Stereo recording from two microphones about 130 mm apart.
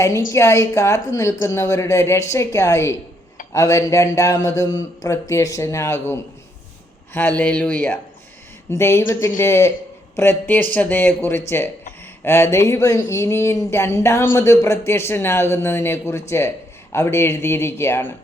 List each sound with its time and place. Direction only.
0.0 s speech: 20° left (ahead or behind)